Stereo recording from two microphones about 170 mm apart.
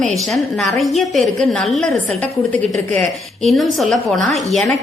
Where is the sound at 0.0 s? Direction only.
Centre (ahead or behind).